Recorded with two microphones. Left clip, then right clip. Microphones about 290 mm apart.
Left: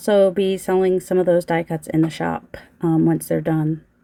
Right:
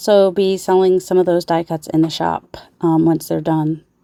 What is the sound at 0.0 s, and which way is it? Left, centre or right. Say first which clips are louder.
Speech: right 3 dB; centre.